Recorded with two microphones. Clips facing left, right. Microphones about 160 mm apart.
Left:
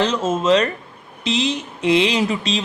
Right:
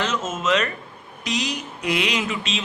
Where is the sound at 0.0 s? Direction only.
30° left (ahead or behind).